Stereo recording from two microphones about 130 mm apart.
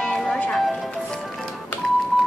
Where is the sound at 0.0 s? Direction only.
5° left (ahead or behind).